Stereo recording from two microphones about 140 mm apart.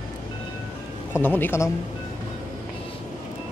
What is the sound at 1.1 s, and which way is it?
Speech, 15° left (ahead or behind).